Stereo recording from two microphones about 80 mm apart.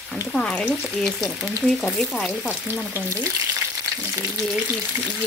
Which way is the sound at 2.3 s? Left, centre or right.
Centre.